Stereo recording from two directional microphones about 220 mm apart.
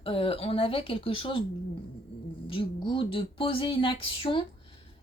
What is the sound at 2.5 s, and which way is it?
Speech, 25° left (ahead or behind).